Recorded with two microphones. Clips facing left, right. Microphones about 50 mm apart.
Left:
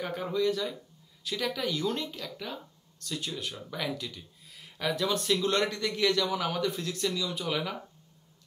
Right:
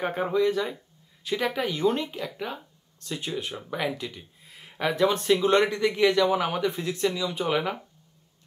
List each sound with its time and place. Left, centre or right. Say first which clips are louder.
0.0 s speech: right 5 dB; right